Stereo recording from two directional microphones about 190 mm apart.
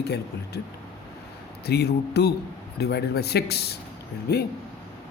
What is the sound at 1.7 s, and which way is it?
Speech, 60° left (ahead or behind).